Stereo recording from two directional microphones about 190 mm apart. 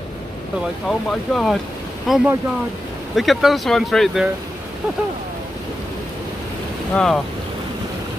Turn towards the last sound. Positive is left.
turn(degrees=0)  # may be behind; listen again after turning